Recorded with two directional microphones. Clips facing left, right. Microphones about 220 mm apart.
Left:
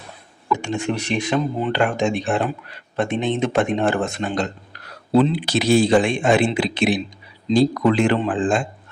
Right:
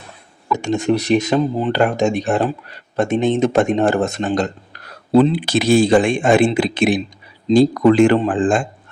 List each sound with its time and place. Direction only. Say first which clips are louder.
0.5 s speech: right 5 dB; 40° right (ahead or behind)